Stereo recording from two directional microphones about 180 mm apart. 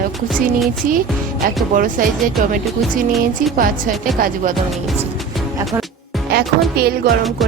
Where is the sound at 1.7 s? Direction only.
45° right (ahead or behind).